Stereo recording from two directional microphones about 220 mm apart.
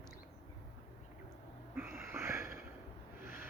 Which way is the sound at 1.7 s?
Centre (ahead or behind).